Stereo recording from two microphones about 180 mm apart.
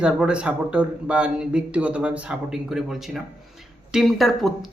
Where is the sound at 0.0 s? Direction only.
5° right (ahead or behind).